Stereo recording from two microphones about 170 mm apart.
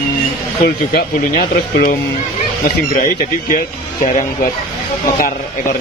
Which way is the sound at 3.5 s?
50° left (ahead or behind).